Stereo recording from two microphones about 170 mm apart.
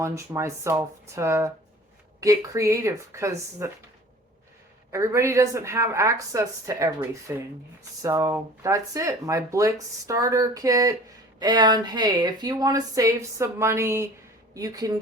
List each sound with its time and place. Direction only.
0.0 s speech: 15° right (ahead or behind)
4.9 s speech: 15° right (ahead or behind)